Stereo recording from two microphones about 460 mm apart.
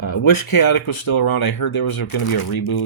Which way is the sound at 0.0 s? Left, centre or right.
Left.